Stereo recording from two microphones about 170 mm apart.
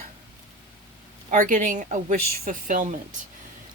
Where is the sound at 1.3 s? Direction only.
50° right (ahead or behind).